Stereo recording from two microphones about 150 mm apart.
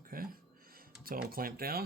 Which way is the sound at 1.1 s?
75° right (ahead or behind).